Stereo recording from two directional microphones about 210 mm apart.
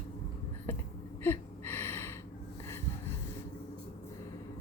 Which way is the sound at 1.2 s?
10° left (ahead or behind).